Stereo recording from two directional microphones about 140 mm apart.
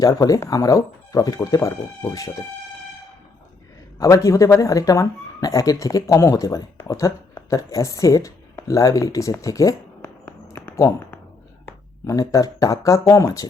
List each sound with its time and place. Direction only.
0.0 s speech: 25° left (ahead or behind)
4.0 s speech: 25° left (ahead or behind)